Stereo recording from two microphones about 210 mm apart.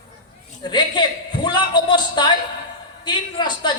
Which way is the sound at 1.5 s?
20° left (ahead or behind).